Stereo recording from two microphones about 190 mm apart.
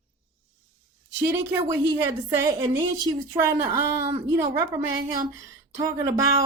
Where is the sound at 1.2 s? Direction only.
15° right (ahead or behind).